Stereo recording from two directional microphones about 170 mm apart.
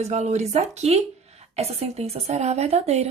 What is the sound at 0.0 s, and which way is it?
Speech, 40° right (ahead or behind).